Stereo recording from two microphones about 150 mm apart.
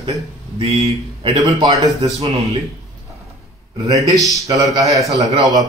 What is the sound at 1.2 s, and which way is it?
Speech, 30° right (ahead or behind).